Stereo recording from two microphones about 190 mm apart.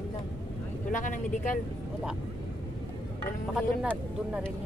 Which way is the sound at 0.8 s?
45° left (ahead or behind).